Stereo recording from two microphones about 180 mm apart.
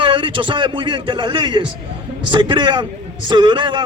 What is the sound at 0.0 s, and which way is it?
A man's voice, 30° right (ahead or behind).